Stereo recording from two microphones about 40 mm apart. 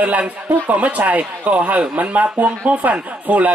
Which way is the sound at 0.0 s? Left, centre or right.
Right.